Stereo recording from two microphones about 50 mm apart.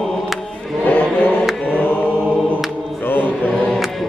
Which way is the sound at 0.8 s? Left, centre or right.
Left.